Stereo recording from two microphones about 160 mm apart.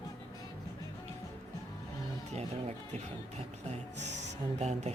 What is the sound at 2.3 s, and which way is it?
Music, 45° right (ahead or behind).